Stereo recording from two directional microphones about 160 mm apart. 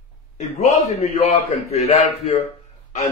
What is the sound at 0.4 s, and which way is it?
A man's voice, 45° left (ahead or behind).